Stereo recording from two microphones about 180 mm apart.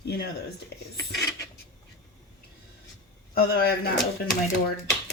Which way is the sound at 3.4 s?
60° left (ahead or behind).